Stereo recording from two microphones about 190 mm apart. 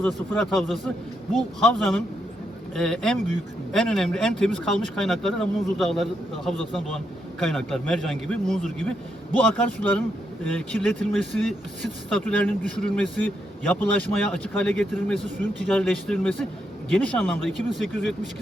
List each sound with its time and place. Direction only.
0.0 s speech: centre (ahead or behind)